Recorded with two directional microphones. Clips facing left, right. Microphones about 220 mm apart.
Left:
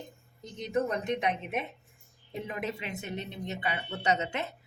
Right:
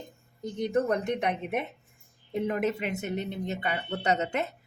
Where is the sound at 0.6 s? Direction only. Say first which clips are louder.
Right 4 dB; 55° right (ahead or behind).